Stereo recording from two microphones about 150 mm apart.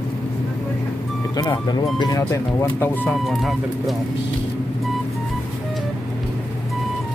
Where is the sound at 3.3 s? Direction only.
Centre (ahead or behind).